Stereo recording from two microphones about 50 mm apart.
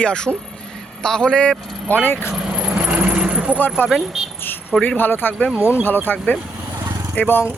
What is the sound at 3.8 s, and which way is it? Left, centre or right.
Speech, centre.